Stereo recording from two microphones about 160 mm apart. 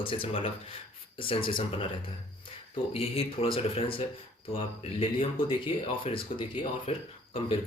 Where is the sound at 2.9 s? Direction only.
35° left (ahead or behind).